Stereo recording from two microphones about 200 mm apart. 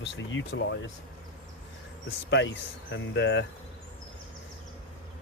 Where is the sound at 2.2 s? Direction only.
65° left (ahead or behind).